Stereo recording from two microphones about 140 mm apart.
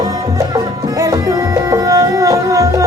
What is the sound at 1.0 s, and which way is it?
Music, 25° right (ahead or behind).